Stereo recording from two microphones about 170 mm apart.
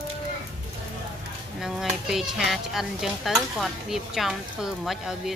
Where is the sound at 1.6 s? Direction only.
Centre (ahead or behind).